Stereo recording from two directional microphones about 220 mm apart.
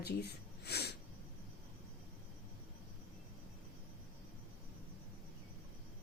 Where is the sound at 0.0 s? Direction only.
50° left (ahead or behind).